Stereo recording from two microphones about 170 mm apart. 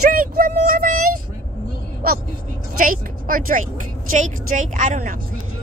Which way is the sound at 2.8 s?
55° right (ahead or behind).